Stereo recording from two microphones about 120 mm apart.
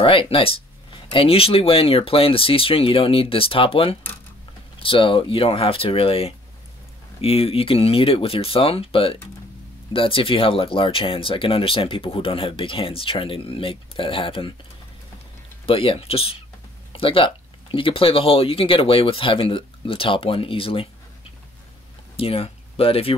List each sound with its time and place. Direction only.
0.0 s speech: 50° left (ahead or behind)
15.6 s speech: 50° left (ahead or behind)
22.1 s speech: 55° left (ahead or behind)